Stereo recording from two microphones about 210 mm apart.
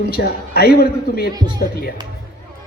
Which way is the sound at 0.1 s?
50° left (ahead or behind).